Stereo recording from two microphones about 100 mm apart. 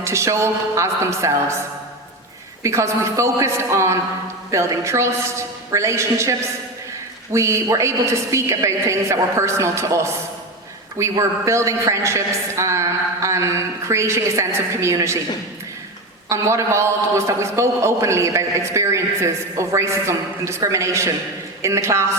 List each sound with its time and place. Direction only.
0.0 s a man's voice: 30° right (ahead or behind)
2.6 s a man's voice: 30° right (ahead or behind)
7.3 s a man's voice: 30° right (ahead or behind)
11.1 s a man's voice: 35° right (ahead or behind)
16.3 s a man's voice: 30° right (ahead or behind)